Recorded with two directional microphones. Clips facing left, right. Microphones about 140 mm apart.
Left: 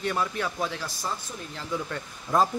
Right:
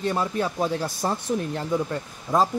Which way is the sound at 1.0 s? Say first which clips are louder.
Right 9 dB; 55° right (ahead or behind).